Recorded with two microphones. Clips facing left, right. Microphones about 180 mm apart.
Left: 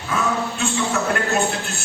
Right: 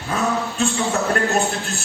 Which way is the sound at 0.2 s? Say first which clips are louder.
Right 2 dB; 35° right (ahead or behind).